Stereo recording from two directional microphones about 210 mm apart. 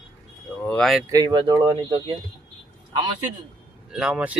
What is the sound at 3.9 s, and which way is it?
Speech, 5° right (ahead or behind).